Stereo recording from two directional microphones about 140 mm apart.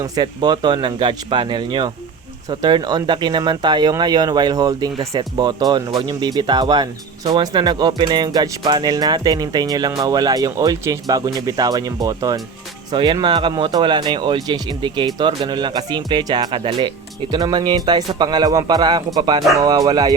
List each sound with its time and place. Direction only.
0.0 s speech: 30° right (ahead or behind)